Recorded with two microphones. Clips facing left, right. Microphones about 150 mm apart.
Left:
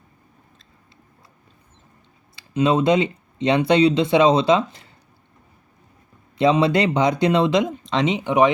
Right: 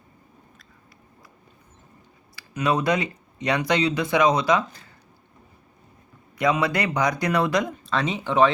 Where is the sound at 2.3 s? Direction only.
25° left (ahead or behind).